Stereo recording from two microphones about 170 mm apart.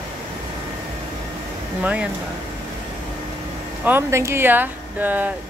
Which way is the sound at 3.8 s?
15° right (ahead or behind).